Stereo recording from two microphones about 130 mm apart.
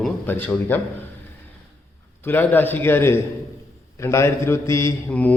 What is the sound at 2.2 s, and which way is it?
A man's voice, 15° left (ahead or behind).